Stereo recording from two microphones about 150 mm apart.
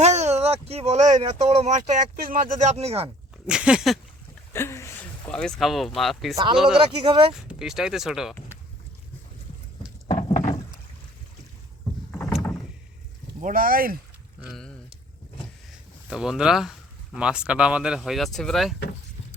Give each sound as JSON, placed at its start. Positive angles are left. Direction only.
{"t": 0.0, "sound": "speech", "side_deg": -50}
{"t": 2.1, "sound": "speech", "side_deg": -75}
{"t": 2.6, "sound": "speech", "side_deg": -45}
{"t": 3.4, "sound": "speech", "side_deg": -5}
{"t": 4.5, "sound": "speech", "side_deg": 15}
{"t": 6.3, "sound": "speech", "side_deg": -30}
{"t": 7.4, "sound": "speech", "side_deg": -5}
{"t": 10.1, "sound": "a sound", "side_deg": 35}
{"t": 12.4, "sound": "rowboat", "side_deg": 20}
{"t": 13.4, "sound": "speech", "side_deg": -65}
{"t": 14.4, "sound": "speech", "side_deg": 0}
{"t": 16.0, "sound": "speech", "side_deg": -5}